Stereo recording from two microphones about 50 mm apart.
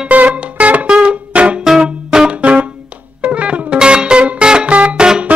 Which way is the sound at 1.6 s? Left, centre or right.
Centre.